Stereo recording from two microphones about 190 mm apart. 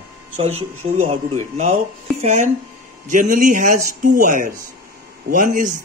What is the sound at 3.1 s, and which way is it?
Speech, 45° right (ahead or behind).